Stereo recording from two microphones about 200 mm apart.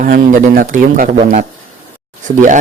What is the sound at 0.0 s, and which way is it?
Speech, 45° right (ahead or behind).